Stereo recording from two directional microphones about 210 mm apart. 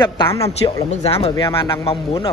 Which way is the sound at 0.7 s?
25° left (ahead or behind).